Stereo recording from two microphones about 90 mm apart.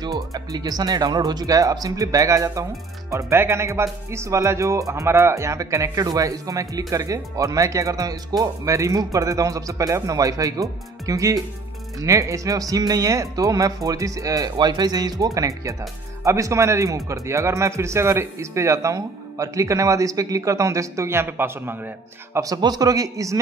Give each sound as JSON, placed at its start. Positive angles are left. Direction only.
{"t": 0.0, "sound": "speech", "side_deg": -40}
{"t": 22.4, "sound": "speech", "side_deg": -45}